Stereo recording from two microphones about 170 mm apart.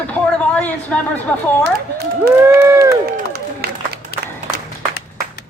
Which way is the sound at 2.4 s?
15° right (ahead or behind).